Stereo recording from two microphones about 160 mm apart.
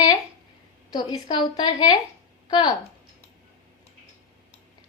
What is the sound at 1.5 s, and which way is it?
Speech, 30° left (ahead or behind).